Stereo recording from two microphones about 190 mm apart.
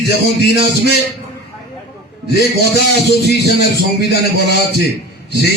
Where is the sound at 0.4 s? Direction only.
60° left (ahead or behind).